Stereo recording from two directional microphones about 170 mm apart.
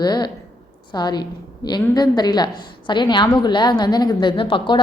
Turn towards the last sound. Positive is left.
turn(degrees=30)  # may be behind; listen again after turning